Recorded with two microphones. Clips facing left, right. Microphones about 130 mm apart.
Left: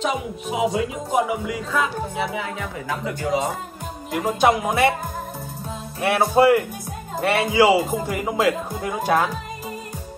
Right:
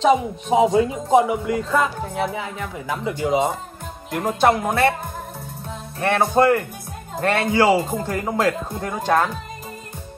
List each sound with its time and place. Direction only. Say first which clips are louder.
0.0 s speech: right 7 dB; 30° right (ahead or behind)
0.7 s music: right 6 dB; 30° right (ahead or behind)
1.3 s music: right 3 dB; 5° left (ahead or behind)
3.1 s music: right 4 dB; 25° right (ahead or behind)
4.1 s music: right 1 dB; centre (ahead or behind)
5.9 s a man's voice: even; 5° left (ahead or behind)